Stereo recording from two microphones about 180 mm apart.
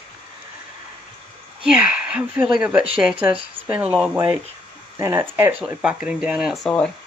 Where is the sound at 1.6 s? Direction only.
5° right (ahead or behind).